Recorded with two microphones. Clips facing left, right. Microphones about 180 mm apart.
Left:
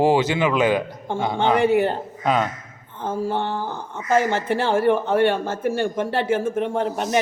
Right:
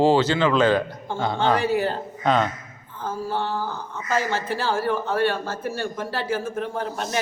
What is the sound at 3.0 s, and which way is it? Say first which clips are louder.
Speech: left 3 dB; 20° left (ahead or behind).